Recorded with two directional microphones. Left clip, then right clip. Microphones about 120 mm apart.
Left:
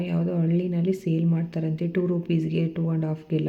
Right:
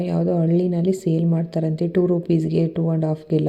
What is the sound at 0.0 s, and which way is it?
Speech, 35° right (ahead or behind).